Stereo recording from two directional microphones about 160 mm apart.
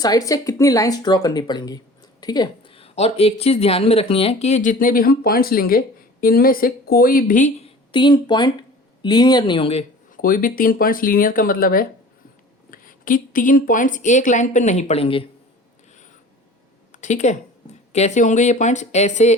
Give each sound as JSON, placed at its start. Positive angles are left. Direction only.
{"t": 0.0, "sound": "speech", "side_deg": 20}
{"t": 7.9, "sound": "speech", "side_deg": 30}
{"t": 10.2, "sound": "speech", "side_deg": 60}
{"t": 16.9, "sound": "speech", "side_deg": 50}